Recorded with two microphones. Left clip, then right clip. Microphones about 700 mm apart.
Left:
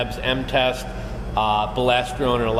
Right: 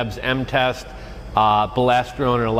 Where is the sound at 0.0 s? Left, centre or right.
Right.